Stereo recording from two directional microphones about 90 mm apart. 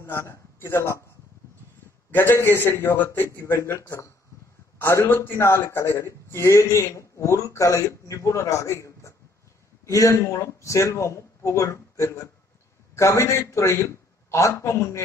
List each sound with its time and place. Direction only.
0.0 s a man's voice: 30° left (ahead or behind)
2.0 s a man's voice: 25° left (ahead or behind)